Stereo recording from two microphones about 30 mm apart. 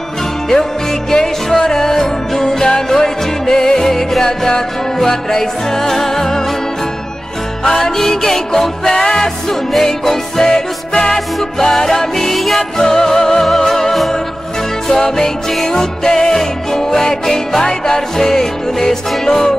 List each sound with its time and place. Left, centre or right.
1.1 s music: centre
7.6 s music: centre
12.4 s music: centre
12.7 s music: centre